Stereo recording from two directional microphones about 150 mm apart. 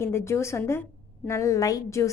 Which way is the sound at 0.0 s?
20° left (ahead or behind).